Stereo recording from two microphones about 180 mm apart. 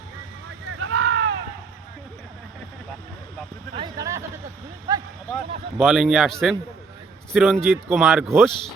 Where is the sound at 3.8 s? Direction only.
20° right (ahead or behind).